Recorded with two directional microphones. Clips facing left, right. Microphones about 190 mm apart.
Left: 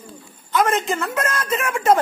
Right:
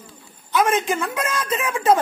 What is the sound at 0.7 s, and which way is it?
A woman's voice, 10° right (ahead or behind).